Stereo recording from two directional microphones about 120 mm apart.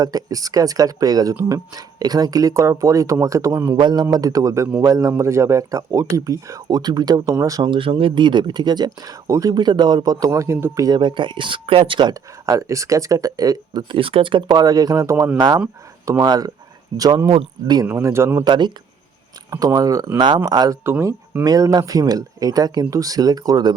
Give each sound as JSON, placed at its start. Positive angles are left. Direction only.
{"t": 0.0, "sound": "speech", "side_deg": -30}
{"t": 3.8, "sound": "speech", "side_deg": -40}
{"t": 7.7, "sound": "speech", "side_deg": -45}
{"t": 10.8, "sound": "speech", "side_deg": -40}
{"t": 16.2, "sound": "speech", "side_deg": -35}
{"t": 17.8, "sound": "speech", "side_deg": -20}
{"t": 18.4, "sound": "speech", "side_deg": -40}
{"t": 19.5, "sound": "speech", "side_deg": -30}
{"t": 20.8, "sound": "speech", "side_deg": -20}